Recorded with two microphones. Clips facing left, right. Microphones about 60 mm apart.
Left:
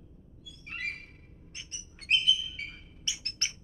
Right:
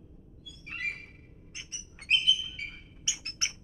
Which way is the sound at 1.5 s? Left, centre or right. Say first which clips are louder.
Right 1 dB; right.